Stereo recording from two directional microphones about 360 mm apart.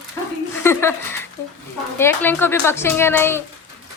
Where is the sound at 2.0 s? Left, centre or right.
Centre.